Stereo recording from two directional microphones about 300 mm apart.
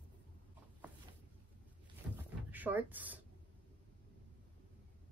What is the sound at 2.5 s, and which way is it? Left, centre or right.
Speech, centre.